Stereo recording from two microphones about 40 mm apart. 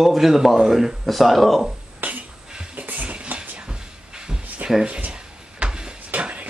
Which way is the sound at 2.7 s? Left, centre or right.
Right.